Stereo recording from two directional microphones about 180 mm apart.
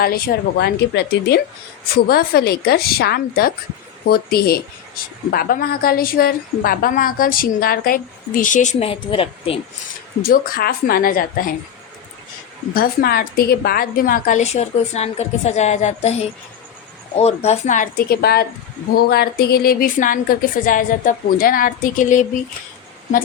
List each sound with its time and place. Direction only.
0.0 s a woman's voice: 60° left (ahead or behind); by 9.6 s 30° left (ahead or behind)
10.2 s a woman's voice: 55° left (ahead or behind)
12.7 s a woman's voice: 55° left (ahead or behind); by 16.1 s 40° left (ahead or behind)
17.2 s a woman's voice: 35° left (ahead or behind)